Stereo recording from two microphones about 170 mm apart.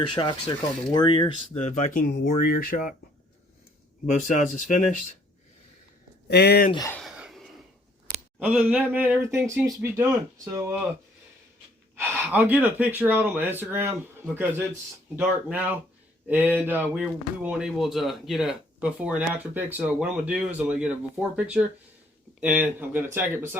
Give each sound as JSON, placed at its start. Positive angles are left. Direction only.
{"t": 0.1, "sound": "speech", "side_deg": 30}
{"t": 1.5, "sound": "speech", "side_deg": 45}
{"t": 2.0, "sound": "speech", "side_deg": 65}
{"t": 4.0, "sound": "speech", "side_deg": 45}
{"t": 6.2, "sound": "speech", "side_deg": 75}
{"t": 6.7, "sound": "speech", "side_deg": 25}
{"t": 6.9, "sound": "a sound", "side_deg": 0}
{"t": 8.4, "sound": "speech", "side_deg": -10}
{"t": 11.9, "sound": "speech", "side_deg": -10}